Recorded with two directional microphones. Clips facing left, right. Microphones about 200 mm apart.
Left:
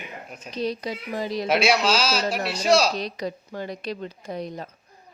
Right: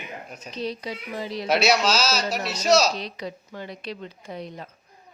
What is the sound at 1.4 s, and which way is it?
Speech, centre (ahead or behind).